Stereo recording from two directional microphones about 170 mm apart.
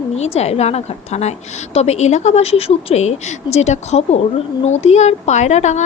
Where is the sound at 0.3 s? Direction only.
40° left (ahead or behind).